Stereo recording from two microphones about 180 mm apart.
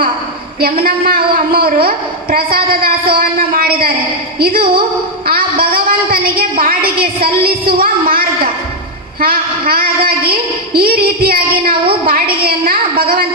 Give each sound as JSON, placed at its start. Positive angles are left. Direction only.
{"t": 0.6, "sound": "a man's voice", "side_deg": -55}